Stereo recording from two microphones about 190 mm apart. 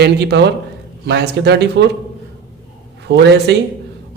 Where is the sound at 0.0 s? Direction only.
60° right (ahead or behind).